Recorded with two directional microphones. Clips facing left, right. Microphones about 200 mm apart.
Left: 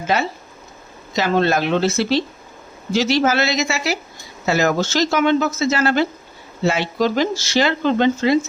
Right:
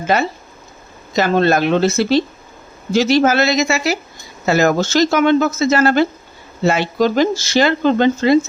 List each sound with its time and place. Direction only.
0.1 s speech: 50° right (ahead or behind)